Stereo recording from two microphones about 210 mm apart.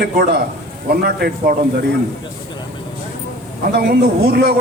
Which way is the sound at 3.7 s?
50° right (ahead or behind).